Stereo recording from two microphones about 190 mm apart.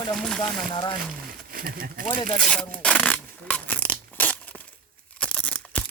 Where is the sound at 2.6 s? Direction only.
5° left (ahead or behind).